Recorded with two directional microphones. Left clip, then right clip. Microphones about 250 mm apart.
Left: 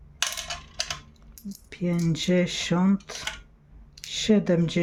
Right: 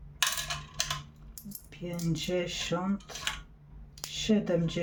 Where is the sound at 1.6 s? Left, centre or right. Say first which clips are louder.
Left 8 dB; left.